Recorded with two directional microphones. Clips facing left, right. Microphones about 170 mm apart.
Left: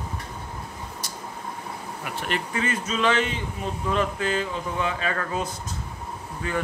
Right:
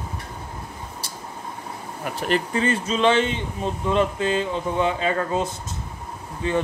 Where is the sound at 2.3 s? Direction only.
30° right (ahead or behind).